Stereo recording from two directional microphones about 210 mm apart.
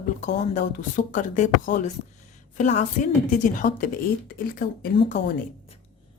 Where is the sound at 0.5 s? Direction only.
35° left (ahead or behind).